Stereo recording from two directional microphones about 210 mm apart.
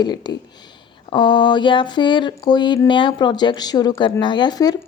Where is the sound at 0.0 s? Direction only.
20° left (ahead or behind).